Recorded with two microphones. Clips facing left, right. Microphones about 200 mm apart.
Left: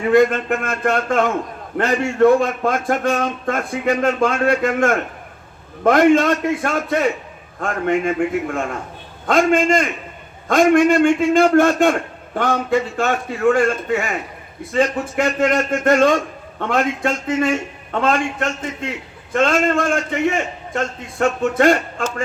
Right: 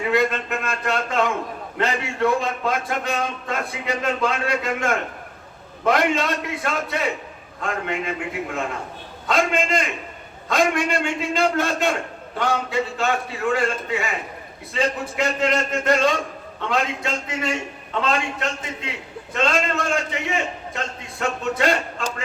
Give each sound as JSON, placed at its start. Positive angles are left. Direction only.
{"t": 0.1, "sound": "a man's voice", "side_deg": 50}
{"t": 9.2, "sound": "a man's voice", "side_deg": 50}